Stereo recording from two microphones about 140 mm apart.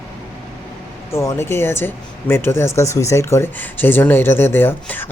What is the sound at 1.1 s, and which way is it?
Speech, 20° left (ahead or behind).